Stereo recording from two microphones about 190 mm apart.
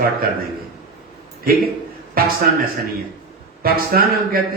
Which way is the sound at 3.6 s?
50° right (ahead or behind).